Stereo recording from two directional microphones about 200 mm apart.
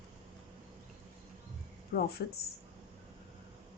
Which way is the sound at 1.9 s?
50° left (ahead or behind).